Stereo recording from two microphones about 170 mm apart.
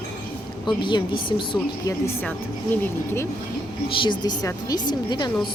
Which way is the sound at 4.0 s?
25° left (ahead or behind).